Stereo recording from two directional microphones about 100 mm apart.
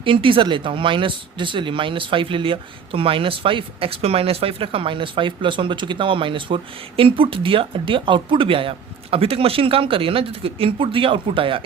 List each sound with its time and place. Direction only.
0.0 s speech: 60° right (ahead or behind)